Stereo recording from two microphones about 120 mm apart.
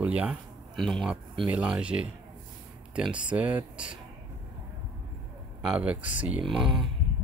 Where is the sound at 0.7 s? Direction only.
Centre (ahead or behind).